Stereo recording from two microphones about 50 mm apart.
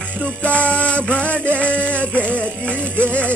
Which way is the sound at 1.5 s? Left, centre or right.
Left.